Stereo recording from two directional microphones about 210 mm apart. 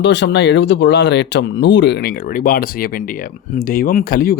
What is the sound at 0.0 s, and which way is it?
Speech, 55° left (ahead or behind).